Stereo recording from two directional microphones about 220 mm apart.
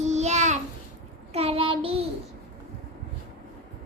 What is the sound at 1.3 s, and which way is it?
Speech, 25° right (ahead or behind).